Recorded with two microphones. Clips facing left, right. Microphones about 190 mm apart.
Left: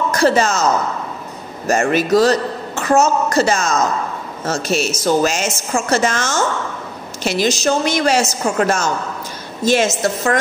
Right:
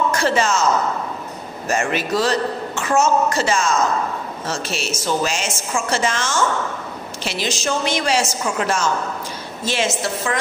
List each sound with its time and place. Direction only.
0.1 s a man's voice: 40° left (ahead or behind)
1.7 s a woman's voice: 40° left (ahead or behind)